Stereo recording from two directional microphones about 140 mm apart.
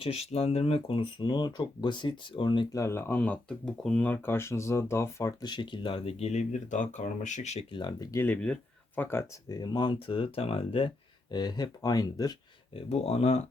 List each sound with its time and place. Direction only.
0.0 s speech: 45° left (ahead or behind)
2.7 s speech: 20° left (ahead or behind); by 7.6 s 55° left (ahead or behind)
7.7 s speech: 30° left (ahead or behind)
8.2 s speech: 10° left (ahead or behind)
9.5 s speech: 30° left (ahead or behind)
12.7 s speech: 50° left (ahead or behind)